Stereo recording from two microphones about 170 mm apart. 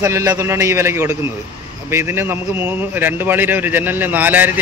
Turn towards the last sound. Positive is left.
turn(degrees=-10)  # may be behind; listen again after turning